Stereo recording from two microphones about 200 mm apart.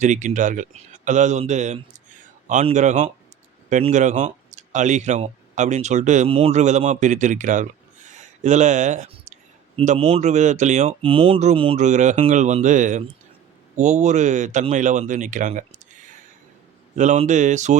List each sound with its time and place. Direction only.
0.0 s speech: 40° right (ahead or behind)
16.9 s speech: 35° right (ahead or behind)